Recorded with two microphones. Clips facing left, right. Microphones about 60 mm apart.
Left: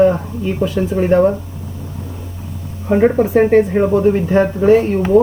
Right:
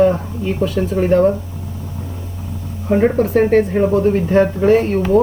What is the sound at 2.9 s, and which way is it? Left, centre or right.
Speech, centre.